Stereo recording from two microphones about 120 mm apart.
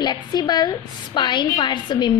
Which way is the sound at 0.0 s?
35° left (ahead or behind).